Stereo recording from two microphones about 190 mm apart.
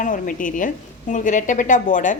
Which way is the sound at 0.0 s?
45° left (ahead or behind).